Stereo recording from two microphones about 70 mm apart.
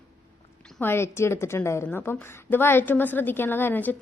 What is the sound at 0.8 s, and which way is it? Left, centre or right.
A woman's voice, left.